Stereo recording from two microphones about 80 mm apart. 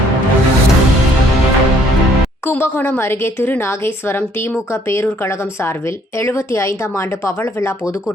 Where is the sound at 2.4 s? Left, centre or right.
Left.